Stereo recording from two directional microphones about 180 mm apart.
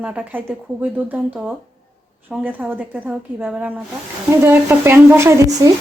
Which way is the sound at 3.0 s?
10° right (ahead or behind).